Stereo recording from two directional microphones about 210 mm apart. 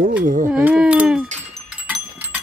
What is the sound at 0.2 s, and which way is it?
Speech, 40° right (ahead or behind).